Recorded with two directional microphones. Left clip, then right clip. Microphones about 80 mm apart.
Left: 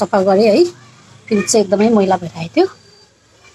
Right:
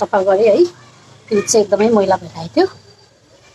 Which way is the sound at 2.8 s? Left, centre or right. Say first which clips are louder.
Even; left.